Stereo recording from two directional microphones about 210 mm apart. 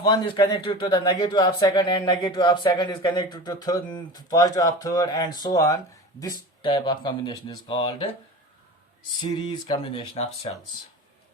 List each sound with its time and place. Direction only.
0.0 s speech: 20° left (ahead or behind)
9.2 s speech: 20° left (ahead or behind)